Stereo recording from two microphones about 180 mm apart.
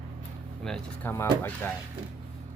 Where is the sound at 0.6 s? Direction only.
5° left (ahead or behind).